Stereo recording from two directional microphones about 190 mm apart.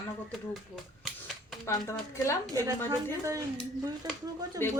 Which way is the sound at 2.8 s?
15° right (ahead or behind).